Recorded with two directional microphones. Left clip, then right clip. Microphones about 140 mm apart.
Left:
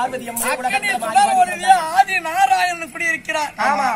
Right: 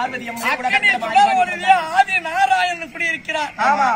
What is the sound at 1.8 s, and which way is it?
A man's voice, 15° right (ahead or behind).